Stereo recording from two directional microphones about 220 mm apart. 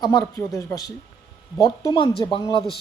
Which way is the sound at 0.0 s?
15° left (ahead or behind).